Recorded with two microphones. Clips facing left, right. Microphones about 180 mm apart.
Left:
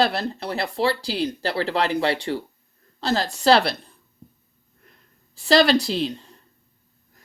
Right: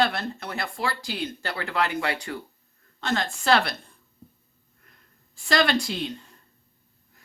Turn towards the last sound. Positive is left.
turn(degrees=35)  # may be behind; listen again after turning